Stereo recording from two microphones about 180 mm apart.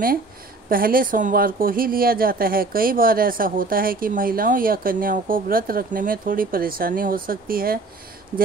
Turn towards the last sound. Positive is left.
turn(degrees=-55)  # may be behind; listen again after turning